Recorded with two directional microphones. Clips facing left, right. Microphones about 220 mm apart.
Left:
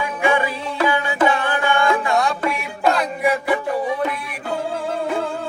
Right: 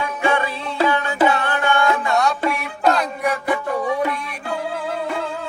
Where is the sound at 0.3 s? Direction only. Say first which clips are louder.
Left 1 dB; 15° left (ahead or behind).